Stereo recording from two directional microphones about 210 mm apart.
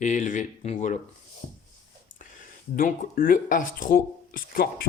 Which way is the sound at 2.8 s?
40° left (ahead or behind).